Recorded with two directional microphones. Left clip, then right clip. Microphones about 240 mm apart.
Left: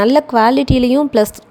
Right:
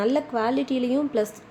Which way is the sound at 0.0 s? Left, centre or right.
Left.